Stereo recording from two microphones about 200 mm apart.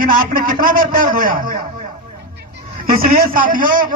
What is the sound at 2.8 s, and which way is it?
A man's voice, 45° right (ahead or behind).